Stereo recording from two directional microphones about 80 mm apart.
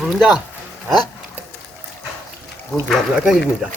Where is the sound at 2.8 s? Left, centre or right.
Centre.